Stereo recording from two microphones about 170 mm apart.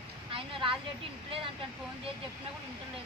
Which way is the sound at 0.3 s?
30° right (ahead or behind).